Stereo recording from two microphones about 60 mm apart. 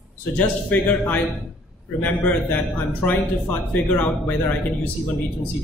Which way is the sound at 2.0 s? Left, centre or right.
Left.